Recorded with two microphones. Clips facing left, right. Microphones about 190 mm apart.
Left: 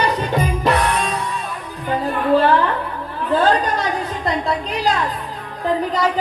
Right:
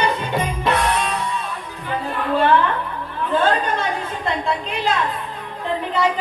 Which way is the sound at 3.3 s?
35° left (ahead or behind).